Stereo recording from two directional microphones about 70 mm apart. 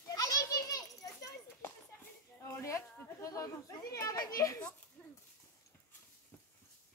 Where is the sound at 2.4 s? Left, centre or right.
Left.